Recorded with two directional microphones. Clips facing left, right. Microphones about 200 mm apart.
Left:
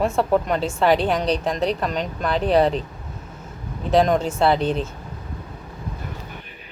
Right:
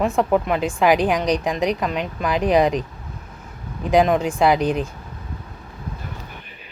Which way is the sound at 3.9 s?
10° right (ahead or behind).